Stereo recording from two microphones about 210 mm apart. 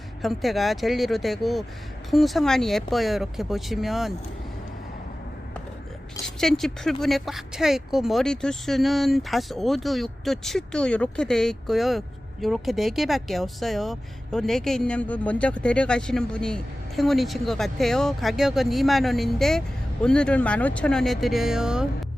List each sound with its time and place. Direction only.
0.2 s speech: centre (ahead or behind)
6.2 s speech: centre (ahead or behind)